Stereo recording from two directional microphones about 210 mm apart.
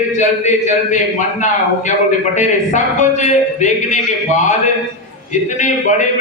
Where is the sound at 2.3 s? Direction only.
35° left (ahead or behind).